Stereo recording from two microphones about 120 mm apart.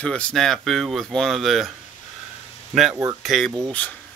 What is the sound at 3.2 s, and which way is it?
Speech, centre (ahead or behind).